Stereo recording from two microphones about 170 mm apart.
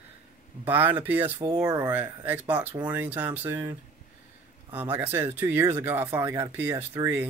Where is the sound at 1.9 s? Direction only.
10° right (ahead or behind).